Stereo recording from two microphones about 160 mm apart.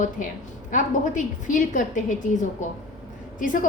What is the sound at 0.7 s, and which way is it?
A woman's voice, 50° left (ahead or behind).